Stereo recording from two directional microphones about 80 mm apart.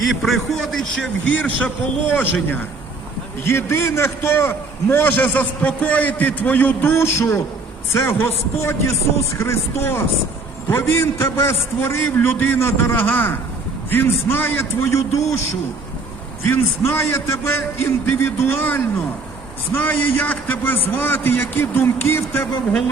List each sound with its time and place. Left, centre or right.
0.2 s a man's voice: centre
1.5 s a man's voice: left
16.4 s a man's voice: left